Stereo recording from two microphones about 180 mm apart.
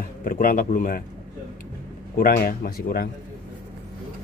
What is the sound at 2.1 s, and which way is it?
Speech, 55° left (ahead or behind).